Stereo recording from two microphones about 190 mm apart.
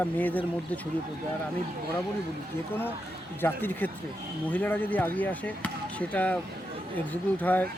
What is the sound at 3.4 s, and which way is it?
Speech, 10° left (ahead or behind).